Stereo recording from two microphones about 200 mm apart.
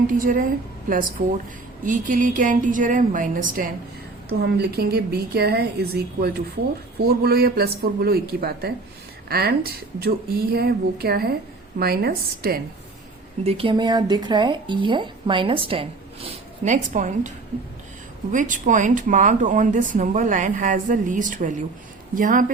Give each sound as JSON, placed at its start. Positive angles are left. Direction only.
{"t": 0.1, "sound": "speech", "side_deg": -45}
{"t": 4.4, "sound": "speech", "side_deg": -55}
{"t": 13.4, "sound": "speech", "side_deg": -30}